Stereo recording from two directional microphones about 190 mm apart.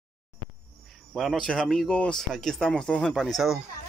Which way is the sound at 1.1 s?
Centre (ahead or behind).